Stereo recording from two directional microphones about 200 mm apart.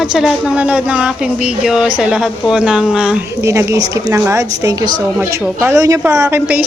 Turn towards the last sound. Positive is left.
turn(degrees=-10)  # may be behind; listen again after turning